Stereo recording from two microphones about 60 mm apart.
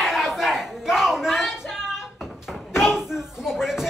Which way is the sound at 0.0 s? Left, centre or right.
Centre.